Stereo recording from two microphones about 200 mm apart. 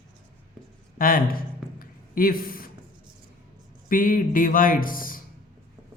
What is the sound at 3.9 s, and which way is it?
Speech, 45° left (ahead or behind).